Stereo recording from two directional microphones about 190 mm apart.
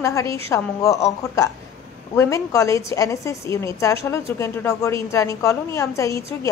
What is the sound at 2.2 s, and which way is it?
A woman's voice, 15° left (ahead or behind).